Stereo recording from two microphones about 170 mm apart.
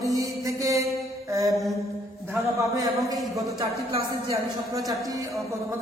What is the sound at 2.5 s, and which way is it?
Speech, 20° right (ahead or behind).